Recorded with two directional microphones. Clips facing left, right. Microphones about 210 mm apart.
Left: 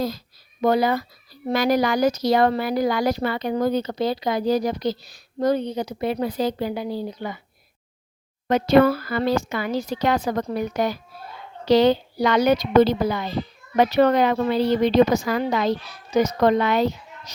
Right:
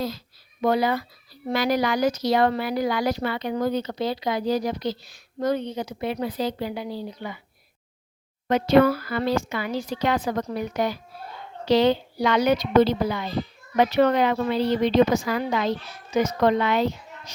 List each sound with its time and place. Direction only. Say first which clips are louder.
0.6 s speech: left 2 dB; 40° left (ahead or behind)
8.4 s a woman's voice: left 2 dB; 45° left (ahead or behind)